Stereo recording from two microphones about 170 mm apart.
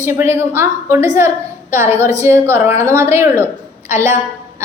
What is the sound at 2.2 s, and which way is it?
A woman's voice, 15° right (ahead or behind).